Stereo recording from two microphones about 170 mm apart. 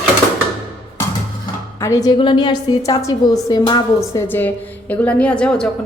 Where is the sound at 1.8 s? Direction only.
20° left (ahead or behind).